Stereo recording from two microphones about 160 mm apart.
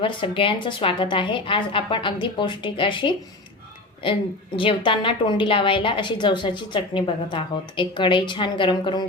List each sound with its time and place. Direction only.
0.0 s a woman's voice: 30° left (ahead or behind)